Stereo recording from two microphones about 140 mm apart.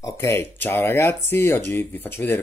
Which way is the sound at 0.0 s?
20° left (ahead or behind).